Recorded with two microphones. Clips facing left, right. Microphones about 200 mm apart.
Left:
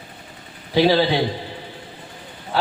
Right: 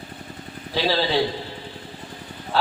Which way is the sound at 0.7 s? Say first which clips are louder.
Left 7 dB; 15° left (ahead or behind).